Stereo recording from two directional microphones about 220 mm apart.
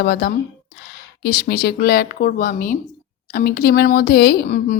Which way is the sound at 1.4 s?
45° left (ahead or behind).